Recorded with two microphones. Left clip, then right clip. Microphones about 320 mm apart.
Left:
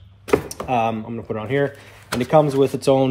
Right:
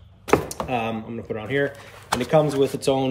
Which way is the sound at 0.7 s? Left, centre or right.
Centre.